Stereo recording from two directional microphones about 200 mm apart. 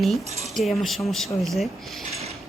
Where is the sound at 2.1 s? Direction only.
30° right (ahead or behind).